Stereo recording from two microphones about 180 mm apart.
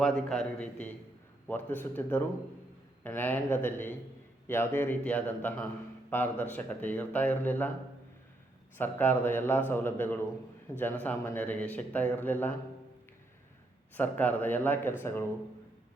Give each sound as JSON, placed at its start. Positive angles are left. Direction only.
{"t": 0.0, "sound": "a man's voice", "side_deg": 5}
{"t": 8.8, "sound": "speech", "side_deg": 10}
{"t": 13.9, "sound": "speech", "side_deg": 10}